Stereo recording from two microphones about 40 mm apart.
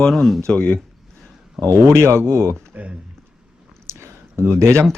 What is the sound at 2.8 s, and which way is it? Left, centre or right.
Speech, right.